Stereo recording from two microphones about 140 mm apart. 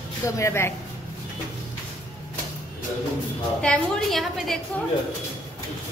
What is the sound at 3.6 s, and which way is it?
A woman's voice, 5° left (ahead or behind).